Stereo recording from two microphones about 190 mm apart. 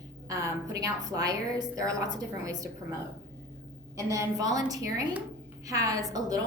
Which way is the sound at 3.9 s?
15° right (ahead or behind).